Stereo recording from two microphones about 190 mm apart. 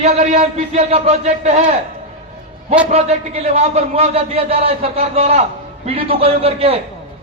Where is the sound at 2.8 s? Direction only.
35° right (ahead or behind).